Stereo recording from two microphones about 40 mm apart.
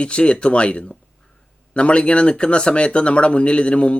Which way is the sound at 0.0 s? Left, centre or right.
Left.